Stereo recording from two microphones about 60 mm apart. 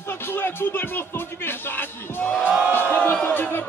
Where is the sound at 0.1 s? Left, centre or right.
Left.